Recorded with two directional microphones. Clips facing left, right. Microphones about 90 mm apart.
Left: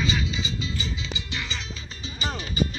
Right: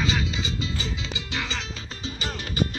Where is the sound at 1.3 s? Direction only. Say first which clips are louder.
Right 5 dB; 90° right.